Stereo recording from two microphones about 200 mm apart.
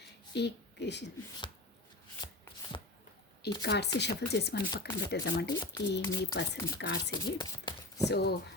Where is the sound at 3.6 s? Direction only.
55° left (ahead or behind).